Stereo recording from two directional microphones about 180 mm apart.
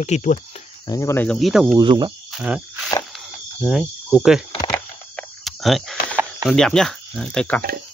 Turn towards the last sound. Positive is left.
turn(degrees=5)  # may be behind; listen again after turning